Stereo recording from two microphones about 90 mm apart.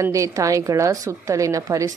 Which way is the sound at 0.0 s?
35° right (ahead or behind).